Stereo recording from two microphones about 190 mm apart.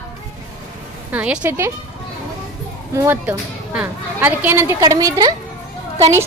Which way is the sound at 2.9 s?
15° right (ahead or behind).